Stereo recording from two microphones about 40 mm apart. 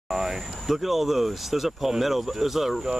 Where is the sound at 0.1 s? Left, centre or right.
Centre.